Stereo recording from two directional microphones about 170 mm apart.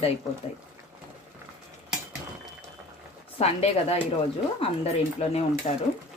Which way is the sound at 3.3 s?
35° left (ahead or behind).